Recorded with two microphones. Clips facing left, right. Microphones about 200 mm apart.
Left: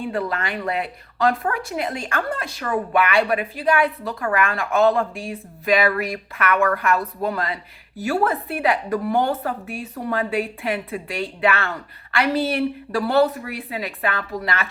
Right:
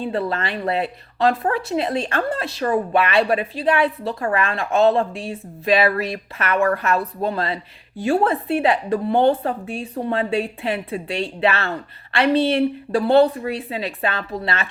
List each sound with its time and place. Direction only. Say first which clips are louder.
0.0 s speech: right 2 dB; 30° right (ahead or behind)